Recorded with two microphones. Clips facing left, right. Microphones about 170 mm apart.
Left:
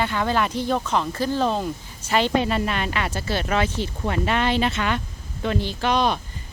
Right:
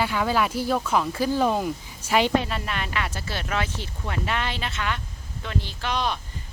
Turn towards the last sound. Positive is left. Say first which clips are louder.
# left 6 dB
turn(degrees=45)  # may be behind; listen again after turning